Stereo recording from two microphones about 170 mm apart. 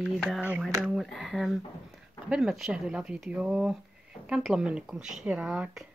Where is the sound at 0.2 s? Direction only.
5° right (ahead or behind).